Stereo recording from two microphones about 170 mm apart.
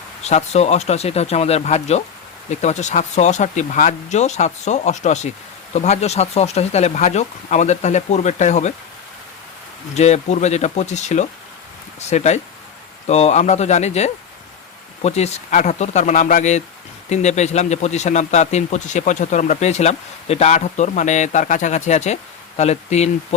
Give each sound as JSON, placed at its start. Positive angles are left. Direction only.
{"t": 0.3, "sound": "a man's voice", "side_deg": 40}
{"t": 9.9, "sound": "a man's voice", "side_deg": 40}